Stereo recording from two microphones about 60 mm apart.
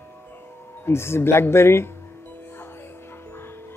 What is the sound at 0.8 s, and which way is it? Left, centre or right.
Speech, left.